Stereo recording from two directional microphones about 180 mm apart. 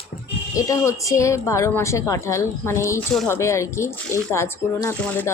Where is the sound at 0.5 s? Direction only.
15° left (ahead or behind).